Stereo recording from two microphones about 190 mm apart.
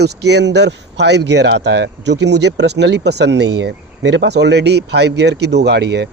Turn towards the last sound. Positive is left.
turn(degrees=-60)  # may be behind; listen again after turning